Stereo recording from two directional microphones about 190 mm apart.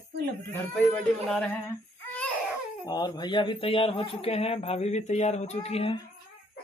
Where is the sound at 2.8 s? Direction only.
20° left (ahead or behind).